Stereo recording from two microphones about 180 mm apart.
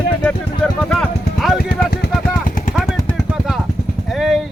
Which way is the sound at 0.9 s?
Centre (ahead or behind).